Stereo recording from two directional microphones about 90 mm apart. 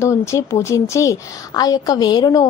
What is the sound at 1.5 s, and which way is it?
Speech, 45° left (ahead or behind).